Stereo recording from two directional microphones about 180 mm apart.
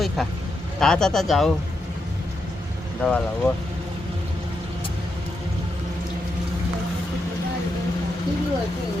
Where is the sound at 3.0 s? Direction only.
5° left (ahead or behind).